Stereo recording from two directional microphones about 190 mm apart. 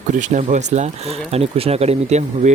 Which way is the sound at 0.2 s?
40° right (ahead or behind).